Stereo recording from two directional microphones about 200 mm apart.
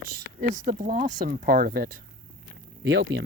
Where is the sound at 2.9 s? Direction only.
55° right (ahead or behind).